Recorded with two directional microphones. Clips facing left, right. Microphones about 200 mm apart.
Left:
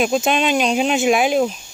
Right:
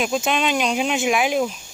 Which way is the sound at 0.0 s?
25° left (ahead or behind).